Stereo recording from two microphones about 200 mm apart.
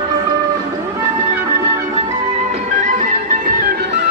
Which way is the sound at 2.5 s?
35° right (ahead or behind).